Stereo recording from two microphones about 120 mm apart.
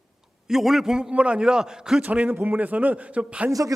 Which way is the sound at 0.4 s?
Centre (ahead or behind).